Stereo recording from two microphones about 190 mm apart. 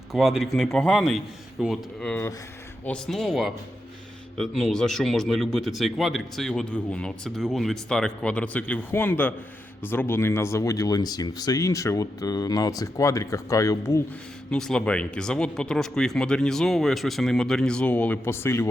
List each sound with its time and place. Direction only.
0.1 s speech: centre (ahead or behind); by 14.0 s 15° left (ahead or behind)
14.5 s speech: 5° left (ahead or behind)